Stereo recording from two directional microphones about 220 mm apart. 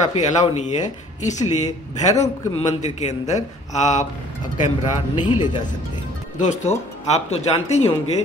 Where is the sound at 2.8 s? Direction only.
30° left (ahead or behind).